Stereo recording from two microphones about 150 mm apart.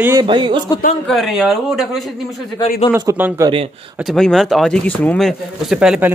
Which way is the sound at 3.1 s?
15° right (ahead or behind).